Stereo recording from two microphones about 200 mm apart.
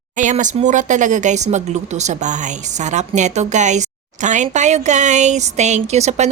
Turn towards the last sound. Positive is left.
turn(degrees=-35)  # may be behind; listen again after turning